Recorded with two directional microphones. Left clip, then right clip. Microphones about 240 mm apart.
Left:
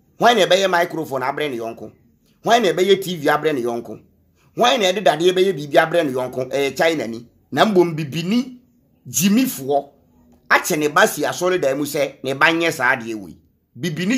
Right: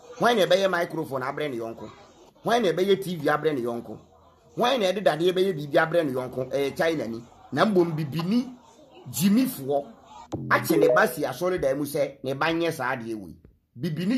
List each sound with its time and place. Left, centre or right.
0.2 s a man's voice: centre